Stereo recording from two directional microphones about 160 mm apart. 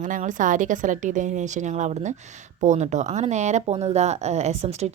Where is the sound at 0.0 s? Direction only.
50° right (ahead or behind).